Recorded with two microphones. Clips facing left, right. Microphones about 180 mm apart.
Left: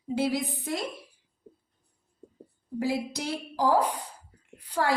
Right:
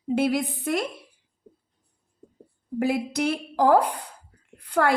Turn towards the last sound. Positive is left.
turn(degrees=-60)  # may be behind; listen again after turning